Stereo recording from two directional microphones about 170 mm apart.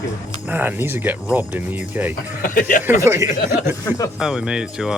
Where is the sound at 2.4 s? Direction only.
55° left (ahead or behind).